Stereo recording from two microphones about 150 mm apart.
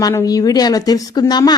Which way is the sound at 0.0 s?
20° left (ahead or behind).